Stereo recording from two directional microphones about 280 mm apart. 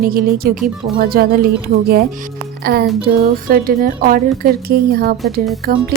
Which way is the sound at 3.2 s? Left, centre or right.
Right.